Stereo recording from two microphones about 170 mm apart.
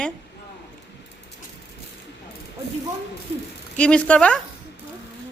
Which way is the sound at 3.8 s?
5° left (ahead or behind).